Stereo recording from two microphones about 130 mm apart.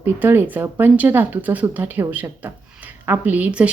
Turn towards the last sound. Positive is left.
turn(degrees=-10)  # may be behind; listen again after turning